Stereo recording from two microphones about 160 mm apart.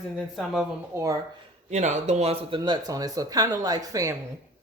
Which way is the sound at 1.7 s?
45° right (ahead or behind).